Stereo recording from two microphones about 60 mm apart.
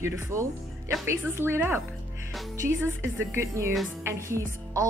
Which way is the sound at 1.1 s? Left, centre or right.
Right.